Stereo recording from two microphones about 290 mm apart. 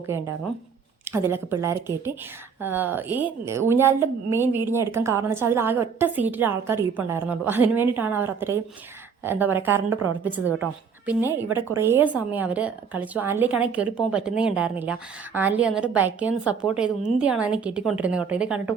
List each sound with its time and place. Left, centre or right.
1.1 s a woman's voice: centre